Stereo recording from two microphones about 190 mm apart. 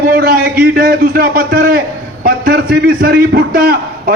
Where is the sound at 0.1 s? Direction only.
50° right (ahead or behind).